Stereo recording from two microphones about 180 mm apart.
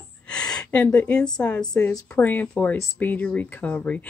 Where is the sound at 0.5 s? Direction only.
5° left (ahead or behind).